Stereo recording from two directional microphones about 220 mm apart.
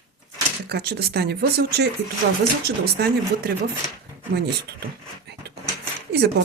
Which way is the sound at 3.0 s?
45° right (ahead or behind).